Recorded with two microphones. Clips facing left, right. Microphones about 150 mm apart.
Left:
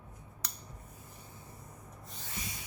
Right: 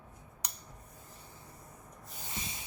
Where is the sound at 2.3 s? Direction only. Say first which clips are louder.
Even; 25° right (ahead or behind).